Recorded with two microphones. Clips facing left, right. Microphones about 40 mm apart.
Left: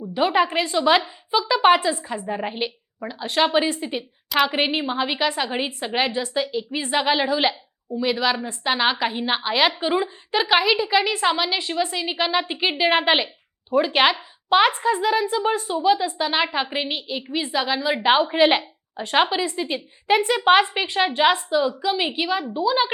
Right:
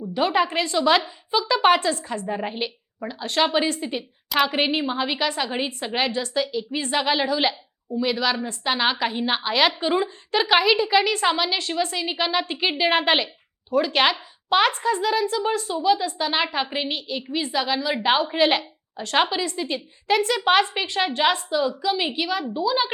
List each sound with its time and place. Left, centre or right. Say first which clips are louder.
0.1 s a woman's voice: left 2 dB; centre
1.3 s a woman's voice: left 2 dB; centre